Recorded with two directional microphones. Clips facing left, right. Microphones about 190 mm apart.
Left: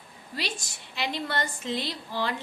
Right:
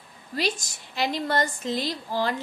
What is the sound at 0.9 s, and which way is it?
A woman's voice, 40° right (ahead or behind).